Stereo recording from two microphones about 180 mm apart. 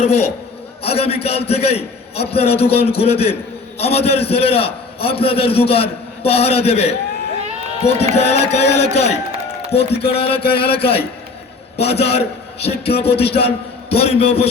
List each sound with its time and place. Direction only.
0.0 s a man's voice: 35° left (ahead or behind)